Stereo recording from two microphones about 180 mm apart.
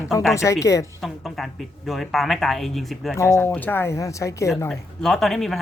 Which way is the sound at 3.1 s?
15° left (ahead or behind).